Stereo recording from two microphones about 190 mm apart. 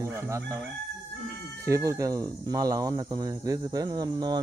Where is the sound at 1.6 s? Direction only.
15° right (ahead or behind).